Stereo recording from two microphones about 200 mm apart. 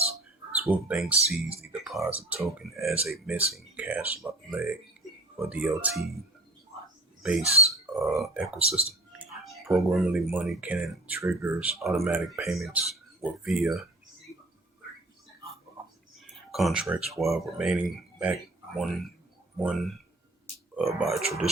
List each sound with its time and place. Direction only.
0.6 s speech: 5° right (ahead or behind)
2.0 s speech: 30° right (ahead or behind)
2.7 s speech: 15° right (ahead or behind)
7.2 s speech: 5° right (ahead or behind)
8.7 s a sound: 5° right (ahead or behind)
9.8 s speech: centre (ahead or behind)
16.2 s speech: centre (ahead or behind)
18.8 s speech: centre (ahead or behind)